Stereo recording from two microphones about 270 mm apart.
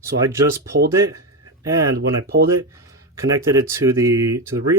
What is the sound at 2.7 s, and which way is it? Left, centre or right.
Speech, centre.